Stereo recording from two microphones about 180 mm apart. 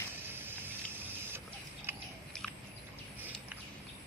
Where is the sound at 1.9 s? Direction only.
15° right (ahead or behind).